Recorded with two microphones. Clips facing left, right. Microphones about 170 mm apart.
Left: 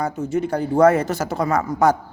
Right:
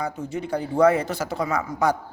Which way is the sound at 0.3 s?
45° left (ahead or behind).